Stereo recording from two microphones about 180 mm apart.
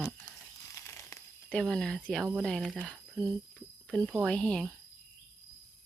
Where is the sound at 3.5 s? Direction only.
5° left (ahead or behind).